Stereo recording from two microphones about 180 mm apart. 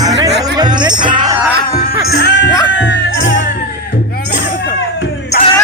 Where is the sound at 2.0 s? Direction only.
70° left (ahead or behind).